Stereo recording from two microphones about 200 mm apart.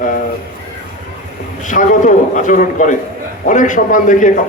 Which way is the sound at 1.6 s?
40° left (ahead or behind).